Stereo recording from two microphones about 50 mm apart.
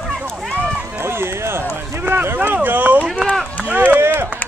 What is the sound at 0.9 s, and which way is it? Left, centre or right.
Run, right.